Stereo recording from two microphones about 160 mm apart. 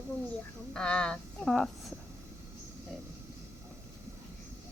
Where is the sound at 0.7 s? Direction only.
5° left (ahead or behind).